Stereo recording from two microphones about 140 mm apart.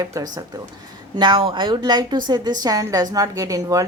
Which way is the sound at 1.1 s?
35° right (ahead or behind).